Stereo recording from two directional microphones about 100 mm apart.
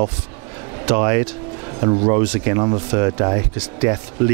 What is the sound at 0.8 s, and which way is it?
Speech, 20° right (ahead or behind).